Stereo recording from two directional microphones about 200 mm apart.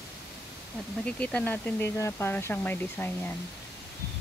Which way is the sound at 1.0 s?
5° left (ahead or behind).